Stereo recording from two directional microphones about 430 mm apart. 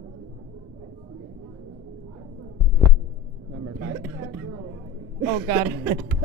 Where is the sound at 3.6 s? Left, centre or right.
Right.